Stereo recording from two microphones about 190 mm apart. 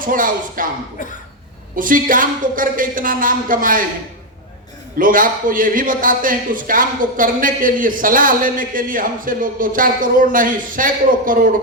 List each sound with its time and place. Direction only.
0.0 s a man's voice: 45° right (ahead or behind)
1.7 s a man's voice: 45° right (ahead or behind)
4.9 s a man's voice: 45° right (ahead or behind)